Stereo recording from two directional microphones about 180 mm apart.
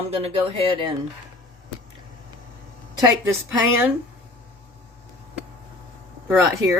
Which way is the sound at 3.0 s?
20° right (ahead or behind).